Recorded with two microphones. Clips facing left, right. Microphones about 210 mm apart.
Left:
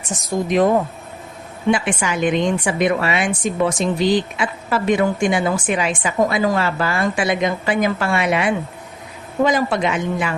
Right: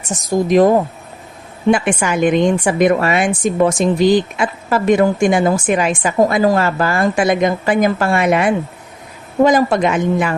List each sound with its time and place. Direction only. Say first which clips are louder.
0.4 s speech: right 5 dB; 40° right (ahead or behind)
1.7 s a woman's voice: right 4 dB; 50° right (ahead or behind)